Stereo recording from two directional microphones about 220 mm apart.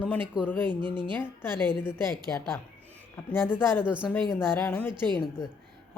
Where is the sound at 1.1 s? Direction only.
10° left (ahead or behind).